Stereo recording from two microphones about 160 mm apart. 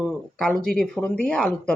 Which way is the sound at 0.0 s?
5° left (ahead or behind).